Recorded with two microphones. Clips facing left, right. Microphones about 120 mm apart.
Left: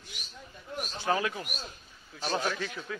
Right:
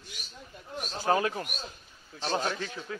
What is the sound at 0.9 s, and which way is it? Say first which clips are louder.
A man's voice: right 3 dB; 40° right (ahead or behind).